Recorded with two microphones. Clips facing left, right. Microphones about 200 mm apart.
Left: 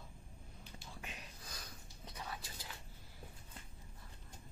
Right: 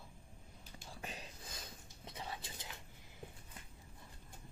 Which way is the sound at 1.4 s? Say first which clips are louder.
Right 1 dB; 25° right (ahead or behind).